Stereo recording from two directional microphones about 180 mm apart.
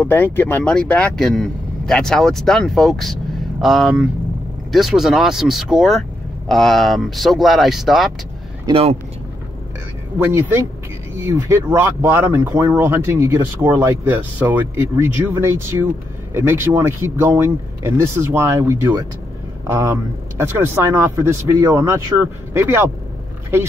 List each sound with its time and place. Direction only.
0.0 s speech: 10° left (ahead or behind)
8.6 s speech: 30° right (ahead or behind)
10.1 s speech: 10° right (ahead or behind)